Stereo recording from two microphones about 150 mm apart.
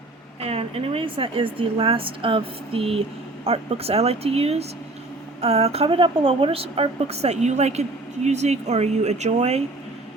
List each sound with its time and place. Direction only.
0.4 s a woman's voice: 40° right (ahead or behind)